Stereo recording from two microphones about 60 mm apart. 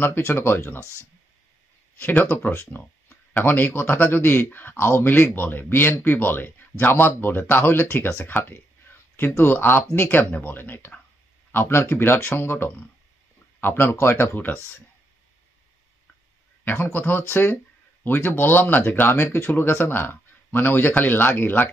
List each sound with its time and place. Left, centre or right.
0.0 s speech: left
2.0 s speech: left
16.6 s speech: left